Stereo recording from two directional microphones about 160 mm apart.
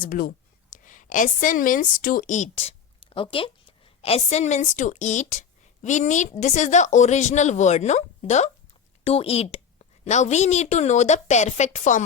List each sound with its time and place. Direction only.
0.0 s a woman's voice: 60° left (ahead or behind)